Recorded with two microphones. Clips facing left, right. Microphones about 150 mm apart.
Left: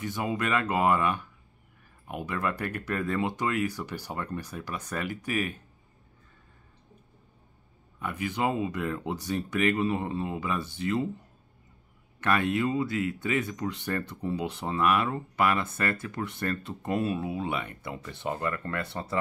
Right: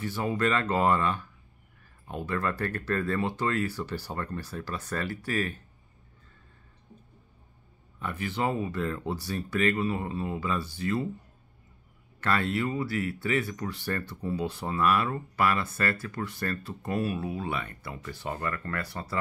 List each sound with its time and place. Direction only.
0.0 s speech: 15° left (ahead or behind)
8.0 s speech: 15° left (ahead or behind)
12.2 s speech: 15° left (ahead or behind)